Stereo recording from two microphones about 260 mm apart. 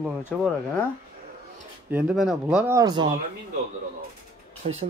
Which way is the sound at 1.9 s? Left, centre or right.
Centre.